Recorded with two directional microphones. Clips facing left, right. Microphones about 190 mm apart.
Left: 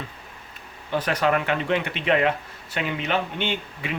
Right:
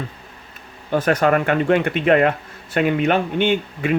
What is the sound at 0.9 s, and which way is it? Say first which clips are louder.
Speech: right 6 dB; 45° right (ahead or behind).